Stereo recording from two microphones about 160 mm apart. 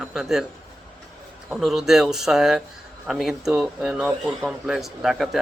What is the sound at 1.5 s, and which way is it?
Speech, centre (ahead or behind).